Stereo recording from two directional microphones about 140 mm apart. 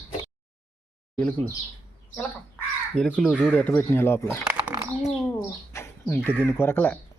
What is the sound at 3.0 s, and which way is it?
Speech, 5° left (ahead or behind).